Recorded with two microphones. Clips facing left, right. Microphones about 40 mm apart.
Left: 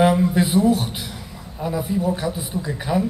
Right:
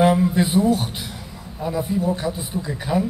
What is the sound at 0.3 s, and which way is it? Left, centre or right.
A man's voice, centre.